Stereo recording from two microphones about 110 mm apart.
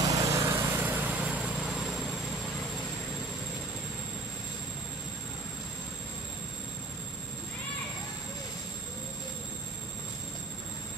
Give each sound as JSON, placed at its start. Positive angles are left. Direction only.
{"t": 0.1, "sound": "vehicle", "side_deg": -30}